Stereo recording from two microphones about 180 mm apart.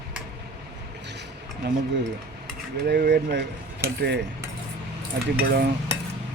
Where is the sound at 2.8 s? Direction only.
70° right (ahead or behind).